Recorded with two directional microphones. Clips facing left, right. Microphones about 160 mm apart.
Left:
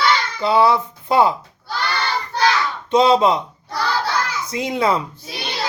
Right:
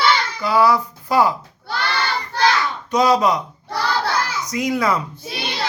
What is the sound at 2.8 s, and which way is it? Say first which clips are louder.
Speech: left 2 dB; 25° left (ahead or behind).